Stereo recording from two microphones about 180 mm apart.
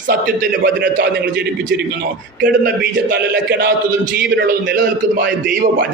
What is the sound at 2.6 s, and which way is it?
A man's voice, 65° right (ahead or behind).